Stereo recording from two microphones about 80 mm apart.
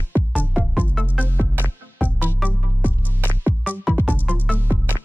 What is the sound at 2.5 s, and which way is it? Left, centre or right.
Music, right.